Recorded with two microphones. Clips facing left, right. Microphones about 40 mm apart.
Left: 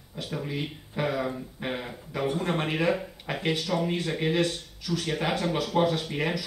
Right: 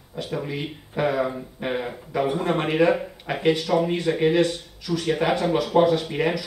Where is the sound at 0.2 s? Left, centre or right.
Centre.